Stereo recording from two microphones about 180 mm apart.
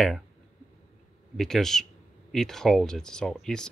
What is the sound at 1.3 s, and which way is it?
Speech, centre (ahead or behind).